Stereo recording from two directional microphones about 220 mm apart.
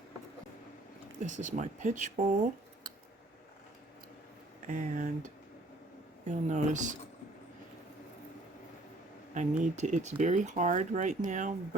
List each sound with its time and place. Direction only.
1.2 s speech: 35° right (ahead or behind)
4.6 s speech: 35° right (ahead or behind)
6.2 s speech: 35° right (ahead or behind)
9.3 s speech: 35° right (ahead or behind)